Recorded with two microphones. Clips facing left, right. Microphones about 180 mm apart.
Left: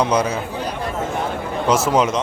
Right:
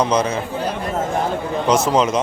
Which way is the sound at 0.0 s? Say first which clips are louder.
Even; 10° left (ahead or behind).